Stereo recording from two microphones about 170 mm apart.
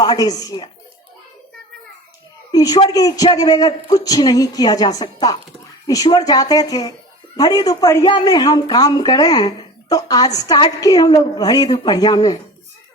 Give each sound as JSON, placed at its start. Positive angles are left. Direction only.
{"t": 0.0, "sound": "a man's voice", "side_deg": 25}
{"t": 2.5, "sound": "a man's voice", "side_deg": 20}